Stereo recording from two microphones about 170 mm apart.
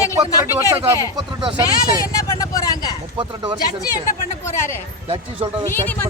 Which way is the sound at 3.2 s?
30° right (ahead or behind).